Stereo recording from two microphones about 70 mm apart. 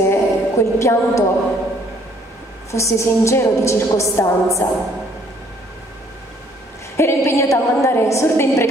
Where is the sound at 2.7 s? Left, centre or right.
Left.